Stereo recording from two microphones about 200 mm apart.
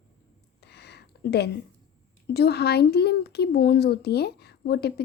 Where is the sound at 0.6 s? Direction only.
55° left (ahead or behind).